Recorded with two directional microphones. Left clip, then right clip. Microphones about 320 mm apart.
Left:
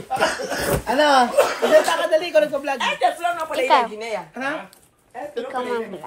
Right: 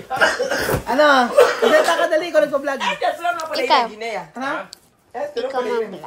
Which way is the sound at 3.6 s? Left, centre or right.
Centre.